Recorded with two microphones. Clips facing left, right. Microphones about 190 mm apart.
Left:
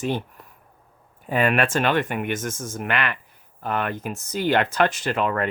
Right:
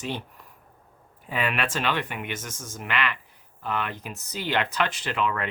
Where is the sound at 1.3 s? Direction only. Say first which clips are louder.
Left 7 dB; 45° left (ahead or behind).